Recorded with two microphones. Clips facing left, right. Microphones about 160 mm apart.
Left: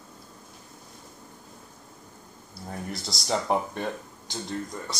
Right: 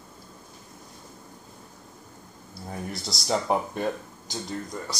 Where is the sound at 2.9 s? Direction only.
Centre (ahead or behind).